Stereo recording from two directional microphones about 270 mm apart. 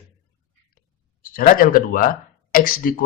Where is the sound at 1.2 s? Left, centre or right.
Left.